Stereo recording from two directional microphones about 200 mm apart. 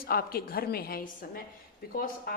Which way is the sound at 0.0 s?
50° left (ahead or behind).